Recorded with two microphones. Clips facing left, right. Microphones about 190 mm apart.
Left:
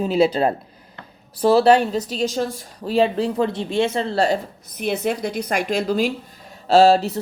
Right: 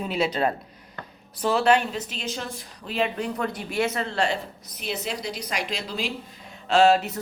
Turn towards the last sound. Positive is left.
turn(degrees=30)  # may be behind; listen again after turning